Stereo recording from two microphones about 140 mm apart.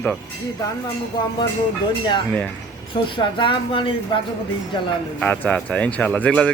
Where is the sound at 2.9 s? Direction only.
35° left (ahead or behind).